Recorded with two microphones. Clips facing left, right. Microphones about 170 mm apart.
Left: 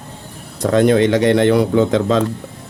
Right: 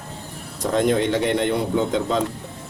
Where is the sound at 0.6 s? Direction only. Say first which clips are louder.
Left 7 dB; 75° left (ahead or behind); by 2.2 s 90° left.